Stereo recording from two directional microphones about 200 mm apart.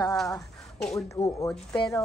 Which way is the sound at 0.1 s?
Centre (ahead or behind).